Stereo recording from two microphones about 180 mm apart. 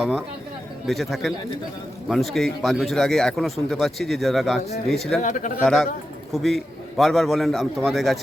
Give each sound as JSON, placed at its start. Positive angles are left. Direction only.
{"t": 0.9, "sound": "a man's voice", "side_deg": 0}
{"t": 5.2, "sound": "speech", "side_deg": 45}
{"t": 5.6, "sound": "a man's voice", "side_deg": 0}